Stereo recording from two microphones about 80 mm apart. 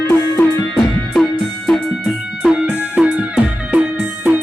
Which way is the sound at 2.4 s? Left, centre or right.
Centre.